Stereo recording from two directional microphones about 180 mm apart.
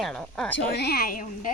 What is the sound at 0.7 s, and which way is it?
Speech, 60° left (ahead or behind).